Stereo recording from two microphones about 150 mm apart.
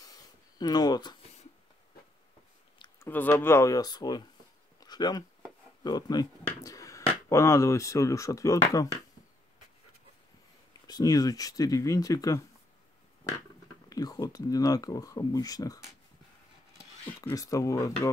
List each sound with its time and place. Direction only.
0.0 s a sound: 25° left (ahead or behind)
3.0 s speech: 15° left (ahead or behind)
4.7 s a sound: 25° left (ahead or behind)
5.9 s speech: 25° left (ahead or behind)
6.6 s finger snapping: 20° left (ahead or behind)
7.2 s speech: 20° left (ahead or behind)
10.9 s speech: 25° left (ahead or behind)
13.8 s speech: 25° left (ahead or behind)
17.3 s speech: 20° left (ahead or behind)